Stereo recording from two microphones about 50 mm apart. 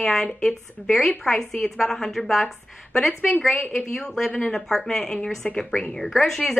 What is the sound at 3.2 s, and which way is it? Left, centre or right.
Speech, left.